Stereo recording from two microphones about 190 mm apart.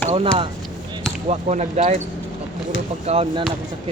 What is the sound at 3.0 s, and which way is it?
Speech, 30° right (ahead or behind).